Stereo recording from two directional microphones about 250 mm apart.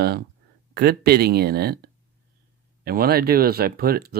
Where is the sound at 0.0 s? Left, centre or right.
Right.